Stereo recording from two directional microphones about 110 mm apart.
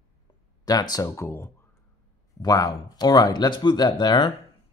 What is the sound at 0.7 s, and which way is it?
Speech, 35° left (ahead or behind).